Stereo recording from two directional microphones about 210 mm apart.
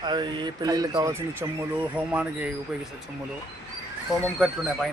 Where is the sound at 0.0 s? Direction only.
20° right (ahead or behind).